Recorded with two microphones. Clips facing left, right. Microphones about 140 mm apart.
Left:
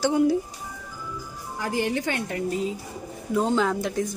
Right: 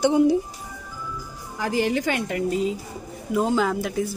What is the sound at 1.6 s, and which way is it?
Speech, 90° right.